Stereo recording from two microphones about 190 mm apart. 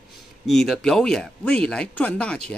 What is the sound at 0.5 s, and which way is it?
Speech, centre (ahead or behind).